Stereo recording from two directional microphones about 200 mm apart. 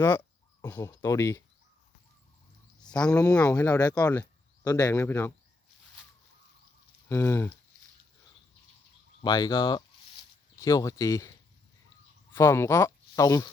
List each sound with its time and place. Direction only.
0.6 s speech: 15° left (ahead or behind)
2.8 s speech: 5° left (ahead or behind)
7.1 s speech: 10° left (ahead or behind)
9.2 s speech: 25° left (ahead or behind)
12.3 s speech: 15° left (ahead or behind)